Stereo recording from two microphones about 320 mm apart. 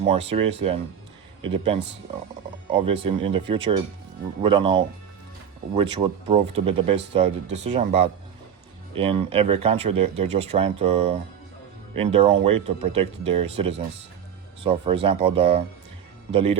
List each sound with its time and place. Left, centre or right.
0.0 s speech: centre
2.8 s speech: centre